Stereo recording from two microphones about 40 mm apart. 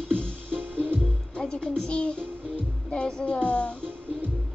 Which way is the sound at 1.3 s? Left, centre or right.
Centre.